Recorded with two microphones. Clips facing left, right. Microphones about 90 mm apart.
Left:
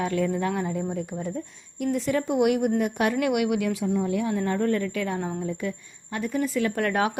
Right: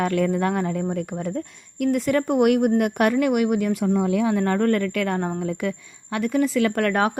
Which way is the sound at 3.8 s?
85° right.